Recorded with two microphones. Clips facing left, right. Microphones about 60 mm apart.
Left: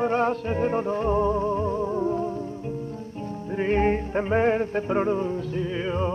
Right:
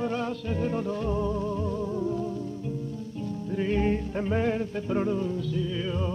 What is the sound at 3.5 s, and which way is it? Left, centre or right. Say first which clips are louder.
Music: left 4 dB; left.